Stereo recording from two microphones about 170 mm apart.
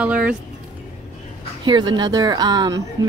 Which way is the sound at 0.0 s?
5° right (ahead or behind).